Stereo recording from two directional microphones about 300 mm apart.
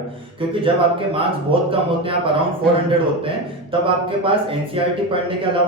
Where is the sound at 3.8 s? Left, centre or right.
Centre.